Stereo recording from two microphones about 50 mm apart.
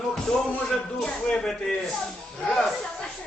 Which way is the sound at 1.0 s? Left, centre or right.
Centre.